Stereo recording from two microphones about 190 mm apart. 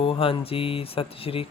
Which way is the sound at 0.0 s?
30° left (ahead or behind).